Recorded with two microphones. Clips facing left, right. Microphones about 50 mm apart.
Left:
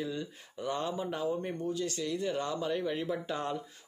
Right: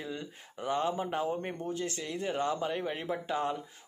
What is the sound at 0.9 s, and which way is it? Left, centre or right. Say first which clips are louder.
Speech: right 1 dB; right.